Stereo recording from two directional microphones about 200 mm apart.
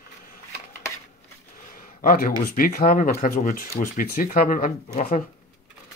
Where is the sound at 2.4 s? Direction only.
45° left (ahead or behind).